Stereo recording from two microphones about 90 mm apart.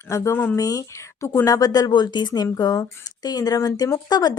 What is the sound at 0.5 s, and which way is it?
A woman's voice, 40° left (ahead or behind).